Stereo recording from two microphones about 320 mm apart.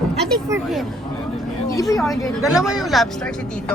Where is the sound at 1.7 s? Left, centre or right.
Centre.